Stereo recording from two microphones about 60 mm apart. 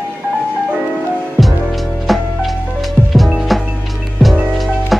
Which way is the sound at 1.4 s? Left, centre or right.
Centre.